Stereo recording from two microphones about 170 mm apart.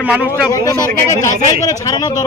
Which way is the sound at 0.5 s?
20° left (ahead or behind).